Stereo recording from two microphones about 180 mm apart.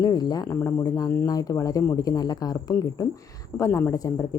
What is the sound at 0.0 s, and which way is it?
A woman's voice, 20° left (ahead or behind).